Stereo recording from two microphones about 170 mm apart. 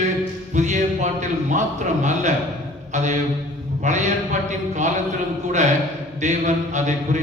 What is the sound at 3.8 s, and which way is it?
Speech, 45° right (ahead or behind).